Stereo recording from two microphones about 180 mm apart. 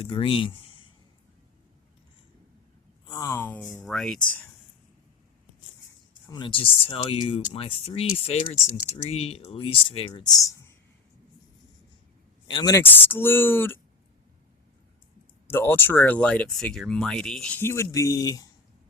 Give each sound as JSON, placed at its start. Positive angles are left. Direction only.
{"t": 0.0, "sound": "speech", "side_deg": 30}
{"t": 3.1, "sound": "speech", "side_deg": 20}
{"t": 6.2, "sound": "speech", "side_deg": 25}
{"t": 12.5, "sound": "speech", "side_deg": 20}
{"t": 15.4, "sound": "speech", "side_deg": 10}